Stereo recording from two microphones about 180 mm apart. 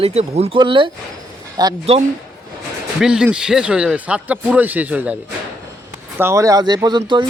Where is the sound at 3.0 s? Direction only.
5° right (ahead or behind).